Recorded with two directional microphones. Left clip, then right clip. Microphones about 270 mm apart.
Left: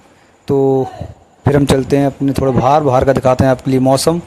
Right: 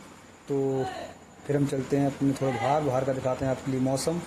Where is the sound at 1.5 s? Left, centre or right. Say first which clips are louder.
Left 15 dB; left.